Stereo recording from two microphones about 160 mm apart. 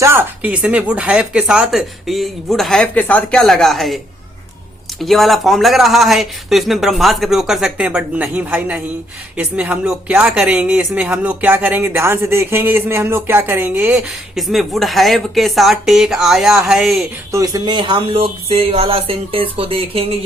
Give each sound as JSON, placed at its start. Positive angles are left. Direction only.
{"t": 0.0, "sound": "speech", "side_deg": -15}
{"t": 17.3, "sound": "speech", "side_deg": -20}